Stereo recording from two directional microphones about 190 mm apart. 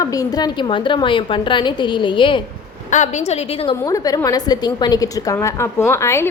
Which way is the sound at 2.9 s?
40° left (ahead or behind).